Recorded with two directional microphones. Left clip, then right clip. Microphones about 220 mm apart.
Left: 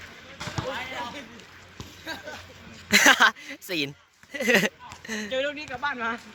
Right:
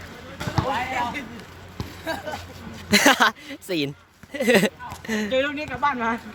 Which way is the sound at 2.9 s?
Centre (ahead or behind).